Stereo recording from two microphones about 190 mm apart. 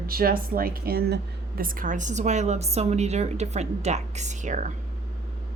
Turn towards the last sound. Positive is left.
turn(degrees=-40)  # may be behind; listen again after turning